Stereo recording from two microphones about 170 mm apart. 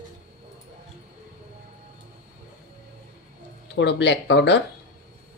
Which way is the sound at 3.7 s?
90° left.